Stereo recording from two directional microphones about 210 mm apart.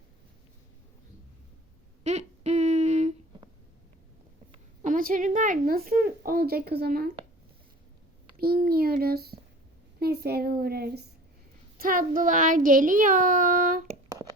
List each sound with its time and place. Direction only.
2.0 s humming: 30° right (ahead or behind)
4.8 s a woman's voice: 40° right (ahead or behind)
8.4 s a woman's voice: 45° right (ahead or behind)